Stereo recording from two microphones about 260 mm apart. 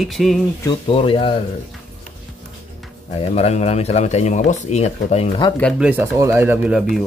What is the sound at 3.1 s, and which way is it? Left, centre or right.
Speech, left.